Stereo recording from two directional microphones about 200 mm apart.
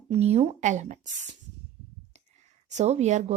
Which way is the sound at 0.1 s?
35° right (ahead or behind).